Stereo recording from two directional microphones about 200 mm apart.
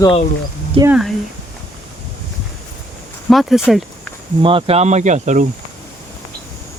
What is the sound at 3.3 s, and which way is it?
Speech, centre (ahead or behind).